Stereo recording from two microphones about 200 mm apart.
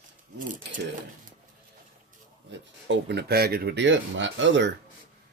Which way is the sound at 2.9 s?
55° right (ahead or behind).